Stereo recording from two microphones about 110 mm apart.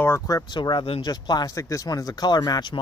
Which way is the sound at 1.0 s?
40° left (ahead or behind).